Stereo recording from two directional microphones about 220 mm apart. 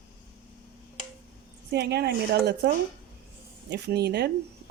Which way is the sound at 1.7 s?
50° right (ahead or behind).